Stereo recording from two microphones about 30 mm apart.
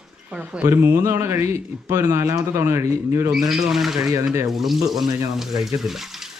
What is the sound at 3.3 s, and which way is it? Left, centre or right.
Speech, centre.